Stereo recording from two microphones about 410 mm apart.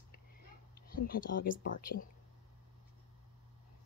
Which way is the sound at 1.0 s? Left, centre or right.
Centre.